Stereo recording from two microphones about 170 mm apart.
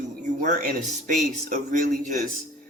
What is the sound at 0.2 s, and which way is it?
Speech, 45° right (ahead or behind).